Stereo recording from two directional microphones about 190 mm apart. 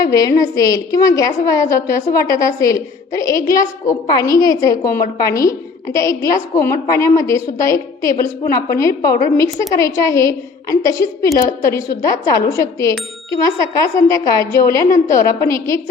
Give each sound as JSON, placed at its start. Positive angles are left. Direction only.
{"t": 0.0, "sound": "a woman's voice", "side_deg": 15}
{"t": 13.9, "sound": "a woman's voice", "side_deg": 15}
{"t": 14.8, "sound": "a woman's voice", "side_deg": 40}
{"t": 15.2, "sound": "a woman's voice", "side_deg": 15}